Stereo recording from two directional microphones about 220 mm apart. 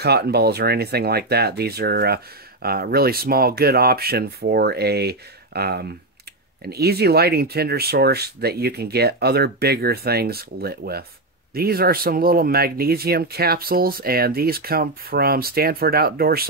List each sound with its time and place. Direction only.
0.0 s speech: 45° right (ahead or behind)